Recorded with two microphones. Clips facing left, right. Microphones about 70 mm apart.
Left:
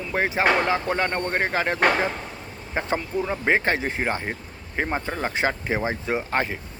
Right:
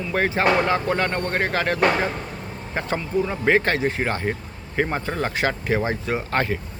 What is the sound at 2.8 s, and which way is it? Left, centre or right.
Speech, left.